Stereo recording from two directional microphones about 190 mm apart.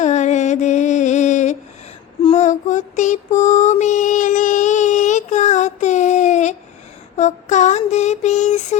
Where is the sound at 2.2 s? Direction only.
40° left (ahead or behind).